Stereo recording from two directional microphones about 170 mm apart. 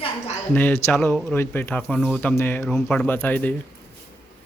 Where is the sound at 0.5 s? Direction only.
10° left (ahead or behind).